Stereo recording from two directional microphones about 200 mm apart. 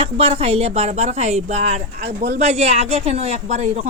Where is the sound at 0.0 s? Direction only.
30° right (ahead or behind).